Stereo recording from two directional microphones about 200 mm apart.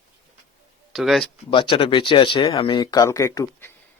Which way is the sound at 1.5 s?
25° left (ahead or behind).